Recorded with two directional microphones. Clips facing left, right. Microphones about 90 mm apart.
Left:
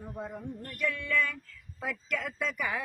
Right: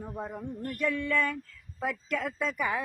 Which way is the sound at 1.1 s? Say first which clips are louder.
Even; 45° right (ahead or behind).